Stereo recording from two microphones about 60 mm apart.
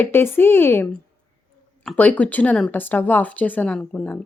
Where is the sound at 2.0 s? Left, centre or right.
Left.